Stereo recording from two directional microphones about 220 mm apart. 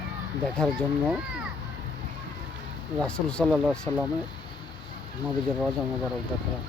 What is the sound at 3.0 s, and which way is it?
Speech, 5° left (ahead or behind).